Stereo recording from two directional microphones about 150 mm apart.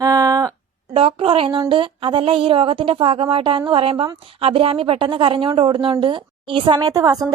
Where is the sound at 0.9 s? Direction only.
35° right (ahead or behind).